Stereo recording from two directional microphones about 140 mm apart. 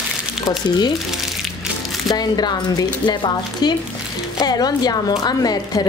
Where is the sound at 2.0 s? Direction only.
30° left (ahead or behind).